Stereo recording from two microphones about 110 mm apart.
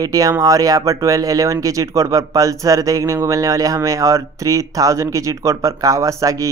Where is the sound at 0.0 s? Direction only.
30° right (ahead or behind).